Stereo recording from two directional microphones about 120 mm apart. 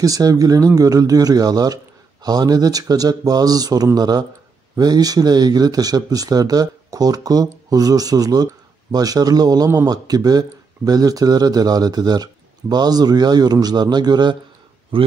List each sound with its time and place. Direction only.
0.0 s speech: 30° right (ahead or behind)
14.9 s a man's voice: 50° right (ahead or behind)